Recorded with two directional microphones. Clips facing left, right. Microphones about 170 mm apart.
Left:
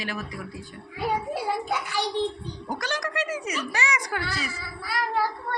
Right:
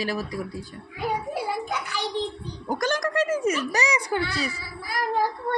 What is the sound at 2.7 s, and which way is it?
A woman's voice, 50° right (ahead or behind).